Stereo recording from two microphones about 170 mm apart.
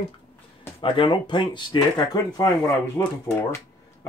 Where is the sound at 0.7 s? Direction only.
30° left (ahead or behind).